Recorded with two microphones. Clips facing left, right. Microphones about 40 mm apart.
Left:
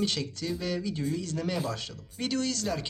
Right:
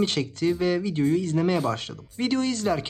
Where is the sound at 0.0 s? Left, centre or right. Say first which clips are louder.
Right 7 dB; right.